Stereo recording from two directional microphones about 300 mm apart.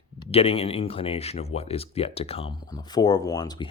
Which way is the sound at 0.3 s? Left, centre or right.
Centre.